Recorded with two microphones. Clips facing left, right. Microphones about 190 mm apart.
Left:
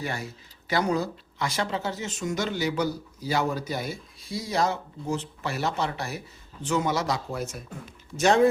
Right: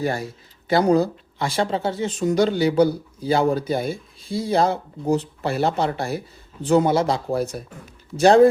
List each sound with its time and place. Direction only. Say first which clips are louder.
0.0 s speech: right 8 dB; 35° right (ahead or behind)